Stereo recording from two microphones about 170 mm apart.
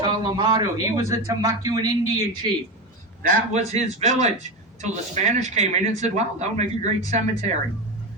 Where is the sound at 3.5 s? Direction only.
40° right (ahead or behind).